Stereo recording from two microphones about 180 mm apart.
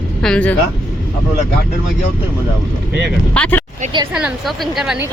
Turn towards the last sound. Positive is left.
turn(degrees=0)  # may be behind; listen again after turning